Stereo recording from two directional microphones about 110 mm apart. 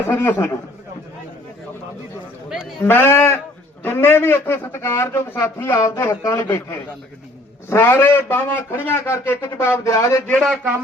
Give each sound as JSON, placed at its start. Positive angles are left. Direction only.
{"t": 0.1, "sound": "a man's voice", "side_deg": 20}
{"t": 2.8, "sound": "a man's voice", "side_deg": 20}